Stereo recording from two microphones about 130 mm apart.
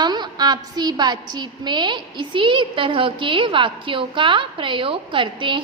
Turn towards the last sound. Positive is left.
turn(degrees=-40)  # may be behind; listen again after turning